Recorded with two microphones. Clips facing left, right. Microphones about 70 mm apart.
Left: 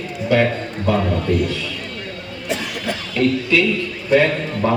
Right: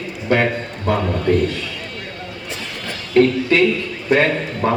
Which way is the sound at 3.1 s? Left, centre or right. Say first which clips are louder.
Right 4 dB; right.